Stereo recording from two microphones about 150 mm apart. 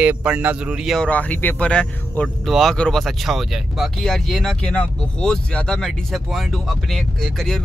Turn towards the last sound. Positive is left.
turn(degrees=0)  # may be behind; listen again after turning